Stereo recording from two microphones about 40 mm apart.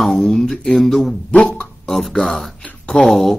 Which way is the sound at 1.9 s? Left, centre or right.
Centre.